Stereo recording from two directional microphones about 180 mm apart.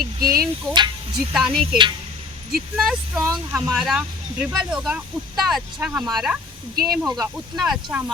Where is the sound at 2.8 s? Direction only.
Centre (ahead or behind).